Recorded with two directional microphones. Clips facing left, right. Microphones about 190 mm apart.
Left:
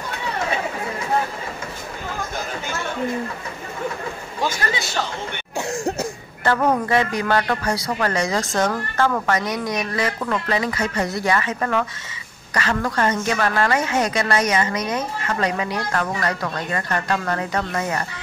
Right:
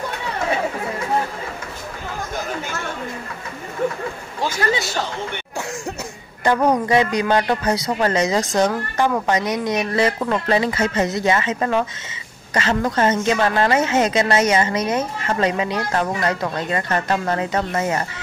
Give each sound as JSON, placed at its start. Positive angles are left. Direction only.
{"t": 6.4, "sound": "a woman's voice", "side_deg": -15}